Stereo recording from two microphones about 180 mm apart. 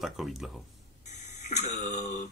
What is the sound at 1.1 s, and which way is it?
Speech, 40° left (ahead or behind).